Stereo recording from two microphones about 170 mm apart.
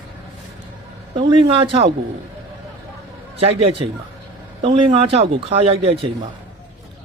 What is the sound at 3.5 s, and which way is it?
Speech, 35° right (ahead or behind).